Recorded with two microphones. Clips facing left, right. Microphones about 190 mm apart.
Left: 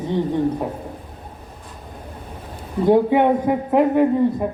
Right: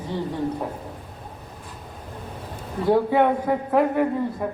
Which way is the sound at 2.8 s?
20° left (ahead or behind).